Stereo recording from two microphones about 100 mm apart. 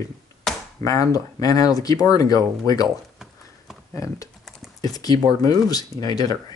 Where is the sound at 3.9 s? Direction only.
30° left (ahead or behind).